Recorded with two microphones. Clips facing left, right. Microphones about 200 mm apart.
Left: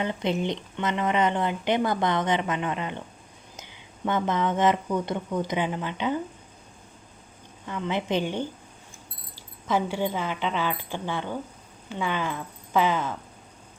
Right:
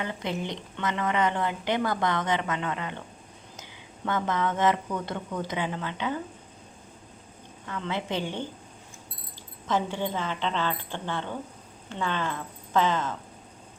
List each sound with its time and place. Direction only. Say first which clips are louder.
0.0 s a woman's voice: left 5 dB; 20° left (ahead or behind)
7.7 s speech: left 4 dB; 15° left (ahead or behind)
9.6 s speech: left 2 dB; 10° left (ahead or behind)